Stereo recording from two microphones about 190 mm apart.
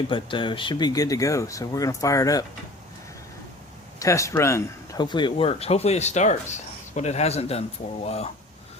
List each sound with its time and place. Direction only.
0.1 s speech: 25° left (ahead or behind)
4.0 s speech: 15° left (ahead or behind); by 8.3 s 35° left (ahead or behind)